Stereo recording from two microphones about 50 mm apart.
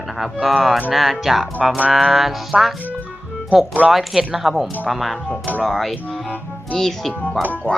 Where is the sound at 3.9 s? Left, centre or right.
Centre.